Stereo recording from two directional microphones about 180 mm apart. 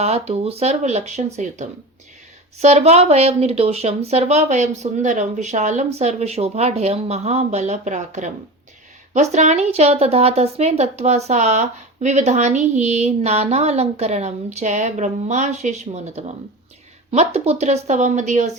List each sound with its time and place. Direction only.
0.0 s a woman's voice: 35° right (ahead or behind)